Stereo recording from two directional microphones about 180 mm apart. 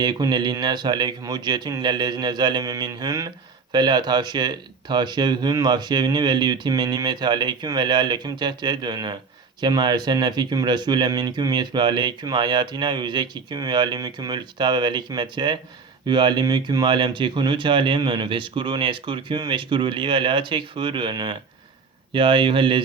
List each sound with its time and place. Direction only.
0.0 s speech: 25° right (ahead or behind)